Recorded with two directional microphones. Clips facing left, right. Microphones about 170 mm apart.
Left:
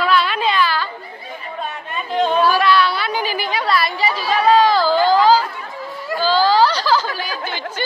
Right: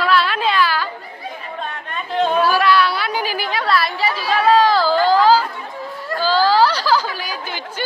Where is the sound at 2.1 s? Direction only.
5° right (ahead or behind).